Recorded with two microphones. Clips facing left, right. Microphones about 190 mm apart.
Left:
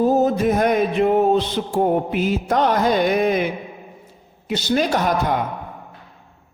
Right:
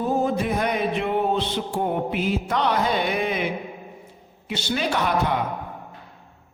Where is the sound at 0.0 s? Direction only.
40° left (ahead or behind).